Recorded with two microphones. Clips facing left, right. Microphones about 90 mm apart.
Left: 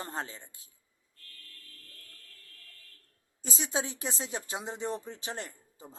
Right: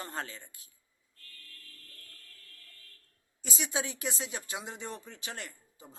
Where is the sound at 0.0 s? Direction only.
25° left (ahead or behind).